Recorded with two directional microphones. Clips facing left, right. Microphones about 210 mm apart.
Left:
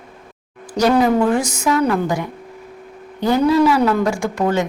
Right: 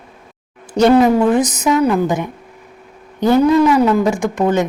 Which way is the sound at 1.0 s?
20° right (ahead or behind).